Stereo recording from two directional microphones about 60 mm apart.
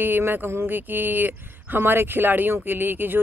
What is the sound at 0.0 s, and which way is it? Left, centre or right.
Speech, right.